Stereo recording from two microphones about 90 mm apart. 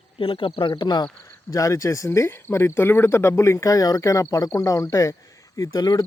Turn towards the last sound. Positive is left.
turn(degrees=50)  # may be behind; listen again after turning